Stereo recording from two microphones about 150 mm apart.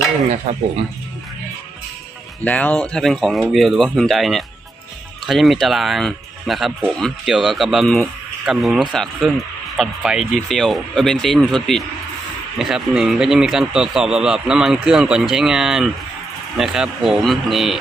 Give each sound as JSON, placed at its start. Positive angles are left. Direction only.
{"t": 0.5, "sound": "speech", "side_deg": -45}
{"t": 2.4, "sound": "speech", "side_deg": 10}